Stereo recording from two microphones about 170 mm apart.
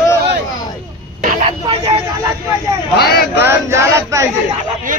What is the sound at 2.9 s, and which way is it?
Speech, 65° left (ahead or behind).